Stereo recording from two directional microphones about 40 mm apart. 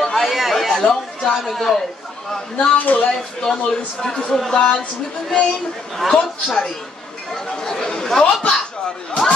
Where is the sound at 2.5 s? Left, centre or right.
Left.